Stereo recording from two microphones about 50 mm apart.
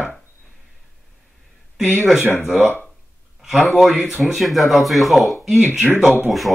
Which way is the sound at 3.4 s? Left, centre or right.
Centre.